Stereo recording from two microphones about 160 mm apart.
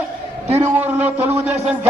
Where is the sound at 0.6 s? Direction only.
10° right (ahead or behind).